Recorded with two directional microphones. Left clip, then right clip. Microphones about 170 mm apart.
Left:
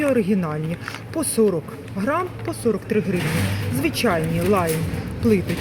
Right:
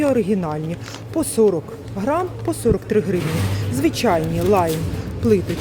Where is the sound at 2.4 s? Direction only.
20° right (ahead or behind).